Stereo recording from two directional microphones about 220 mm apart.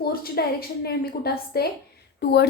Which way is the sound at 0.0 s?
45° left (ahead or behind).